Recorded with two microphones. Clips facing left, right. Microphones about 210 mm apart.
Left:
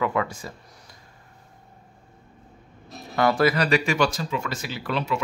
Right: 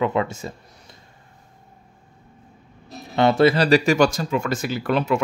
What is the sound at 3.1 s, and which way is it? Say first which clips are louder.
Speech: right 4 dB; 25° right (ahead or behind).